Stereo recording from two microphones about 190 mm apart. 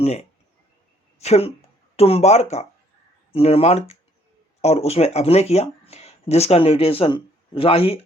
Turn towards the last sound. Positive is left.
turn(degrees=30)  # may be behind; listen again after turning